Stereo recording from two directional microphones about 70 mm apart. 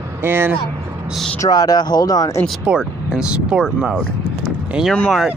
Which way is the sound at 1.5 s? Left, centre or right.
Left.